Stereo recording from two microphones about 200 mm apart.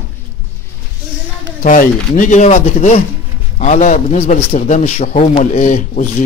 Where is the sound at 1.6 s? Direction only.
40° left (ahead or behind).